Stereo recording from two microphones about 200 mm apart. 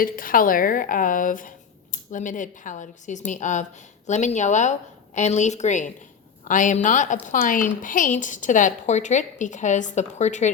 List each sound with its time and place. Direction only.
0.0 s speech: 45° left (ahead or behind)